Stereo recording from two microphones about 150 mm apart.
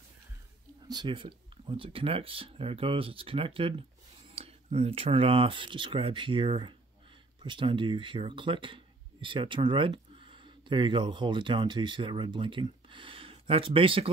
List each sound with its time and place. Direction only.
0.8 s speech: 30° right (ahead or behind)